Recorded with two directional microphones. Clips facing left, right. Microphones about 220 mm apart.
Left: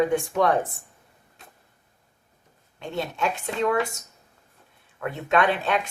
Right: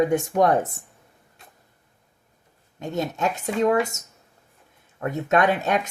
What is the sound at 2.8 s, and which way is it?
Speech, 40° right (ahead or behind).